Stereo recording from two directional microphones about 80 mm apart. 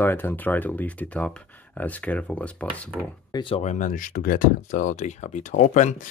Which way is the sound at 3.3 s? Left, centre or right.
Left.